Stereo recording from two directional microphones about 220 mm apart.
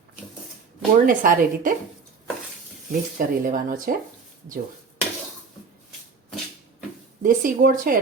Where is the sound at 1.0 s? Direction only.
40° right (ahead or behind).